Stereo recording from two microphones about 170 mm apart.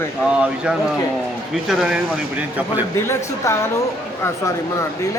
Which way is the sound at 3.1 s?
15° left (ahead or behind).